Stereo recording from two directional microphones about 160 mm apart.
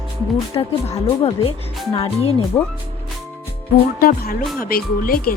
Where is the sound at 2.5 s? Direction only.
15° left (ahead or behind).